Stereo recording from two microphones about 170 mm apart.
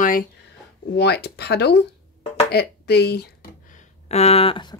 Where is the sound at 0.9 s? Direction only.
75° left (ahead or behind).